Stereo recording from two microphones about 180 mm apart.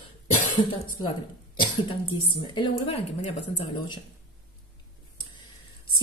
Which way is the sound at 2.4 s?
25° left (ahead or behind).